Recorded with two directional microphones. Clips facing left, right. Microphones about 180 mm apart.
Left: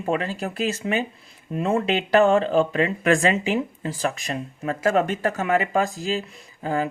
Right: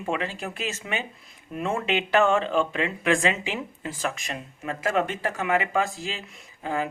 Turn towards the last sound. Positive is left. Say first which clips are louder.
# left 4 dB
turn(degrees=35)  # may be behind; listen again after turning